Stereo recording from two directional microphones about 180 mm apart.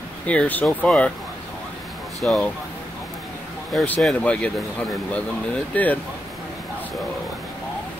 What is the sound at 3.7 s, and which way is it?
Speech, centre (ahead or behind).